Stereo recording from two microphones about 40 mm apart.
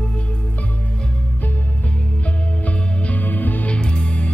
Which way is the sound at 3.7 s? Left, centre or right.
Left.